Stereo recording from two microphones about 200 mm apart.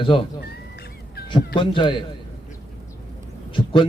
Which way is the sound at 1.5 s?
25° left (ahead or behind).